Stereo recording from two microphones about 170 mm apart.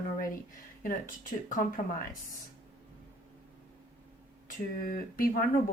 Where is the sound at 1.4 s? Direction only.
50° left (ahead or behind).